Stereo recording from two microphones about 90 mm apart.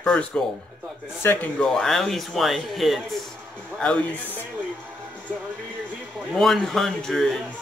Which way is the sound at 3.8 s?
15° left (ahead or behind).